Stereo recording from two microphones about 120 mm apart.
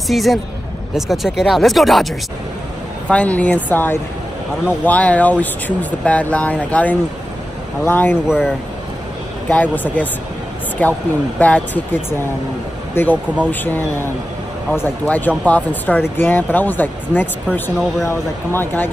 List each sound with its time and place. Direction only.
0.1 s speech: centre (ahead or behind)
3.1 s speech: 10° left (ahead or behind)
9.5 s speech: 15° left (ahead or behind)
12.9 s speech: 15° left (ahead or behind)